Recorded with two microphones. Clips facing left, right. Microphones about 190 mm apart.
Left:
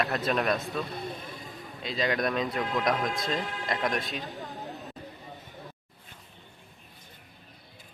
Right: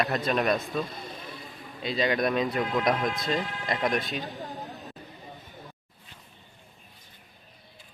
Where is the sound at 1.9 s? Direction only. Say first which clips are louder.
Right 3 dB; centre (ahead or behind).